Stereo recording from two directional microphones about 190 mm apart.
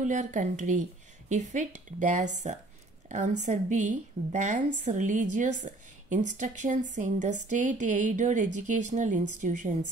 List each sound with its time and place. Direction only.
0.0 s a woman's voice: 40° right (ahead or behind)